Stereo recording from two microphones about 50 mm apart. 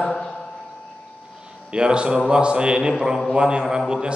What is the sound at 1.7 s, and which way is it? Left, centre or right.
A man's voice, centre.